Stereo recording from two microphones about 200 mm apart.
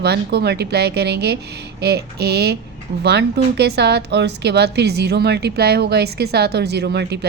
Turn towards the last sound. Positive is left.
turn(degrees=-55)  # may be behind; listen again after turning